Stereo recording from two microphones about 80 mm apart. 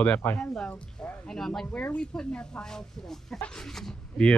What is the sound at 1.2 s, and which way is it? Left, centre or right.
Speech, centre.